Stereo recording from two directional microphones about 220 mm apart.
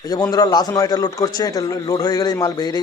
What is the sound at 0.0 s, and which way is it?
A man's voice, 15° left (ahead or behind).